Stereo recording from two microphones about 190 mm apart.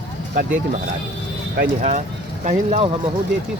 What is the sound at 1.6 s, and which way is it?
Speech, 40° right (ahead or behind).